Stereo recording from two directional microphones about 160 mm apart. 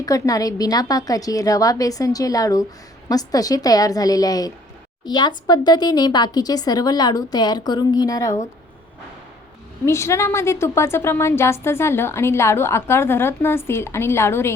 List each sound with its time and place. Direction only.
0.0 s speech: 20° left (ahead or behind)
9.8 s a woman's voice: 15° left (ahead or behind)